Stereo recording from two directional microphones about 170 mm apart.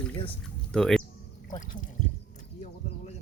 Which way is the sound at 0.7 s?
5° left (ahead or behind).